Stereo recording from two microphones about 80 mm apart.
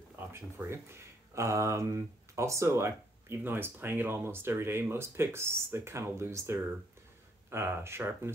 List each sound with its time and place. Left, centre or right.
0.1 s speech: right